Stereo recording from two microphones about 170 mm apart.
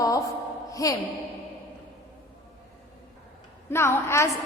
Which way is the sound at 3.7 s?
15° left (ahead or behind).